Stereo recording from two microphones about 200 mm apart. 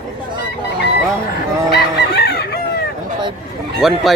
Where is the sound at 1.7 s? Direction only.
55° left (ahead or behind).